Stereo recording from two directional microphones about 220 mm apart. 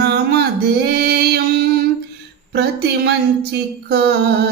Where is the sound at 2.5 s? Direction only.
45° right (ahead or behind).